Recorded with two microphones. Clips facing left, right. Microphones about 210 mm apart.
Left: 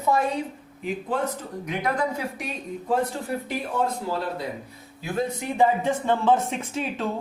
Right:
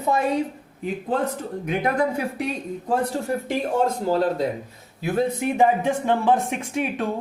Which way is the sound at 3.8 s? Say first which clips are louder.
Right 7 dB; 40° right (ahead or behind).